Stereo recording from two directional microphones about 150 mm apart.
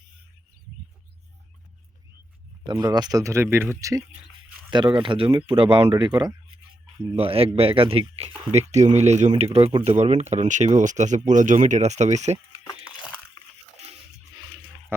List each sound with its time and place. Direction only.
2.6 s speech: 30° right (ahead or behind)
4.7 s speech: 30° right (ahead or behind)
7.2 s speech: 40° right (ahead or behind)
8.5 s speech: 50° right (ahead or behind)